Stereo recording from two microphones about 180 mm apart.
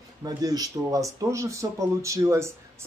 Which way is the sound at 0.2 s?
20° right (ahead or behind).